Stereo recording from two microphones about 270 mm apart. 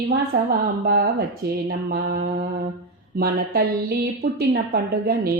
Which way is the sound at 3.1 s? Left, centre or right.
Right.